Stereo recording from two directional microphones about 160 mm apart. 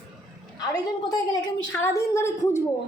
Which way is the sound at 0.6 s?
25° left (ahead or behind).